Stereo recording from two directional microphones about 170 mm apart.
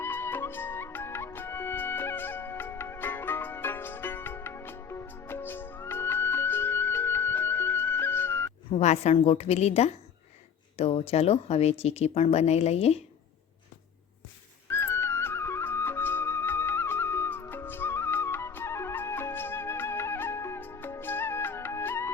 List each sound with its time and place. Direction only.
0.0 s music: 15° left (ahead or behind)
8.7 s speech: 40° left (ahead or behind)
14.7 s flute: 15° left (ahead or behind)